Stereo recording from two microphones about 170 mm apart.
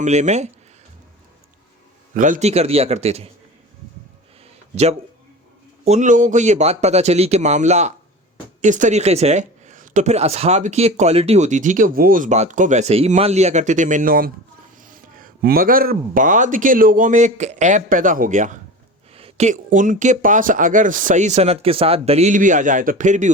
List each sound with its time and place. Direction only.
0.0 s speech: 45° right (ahead or behind)
2.1 s speech: 50° right (ahead or behind)
4.7 s speech: 40° right (ahead or behind)